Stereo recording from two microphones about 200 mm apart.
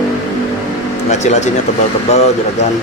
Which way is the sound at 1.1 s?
35° left (ahead or behind).